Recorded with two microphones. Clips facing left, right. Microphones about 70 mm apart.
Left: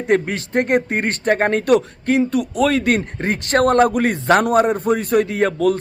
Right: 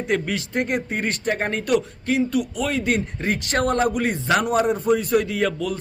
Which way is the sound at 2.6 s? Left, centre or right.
Left.